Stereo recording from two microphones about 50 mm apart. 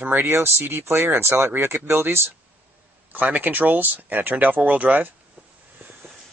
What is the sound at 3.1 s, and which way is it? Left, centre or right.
Speech, right.